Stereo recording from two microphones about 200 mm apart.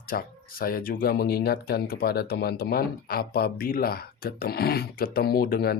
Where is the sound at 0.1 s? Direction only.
45° left (ahead or behind).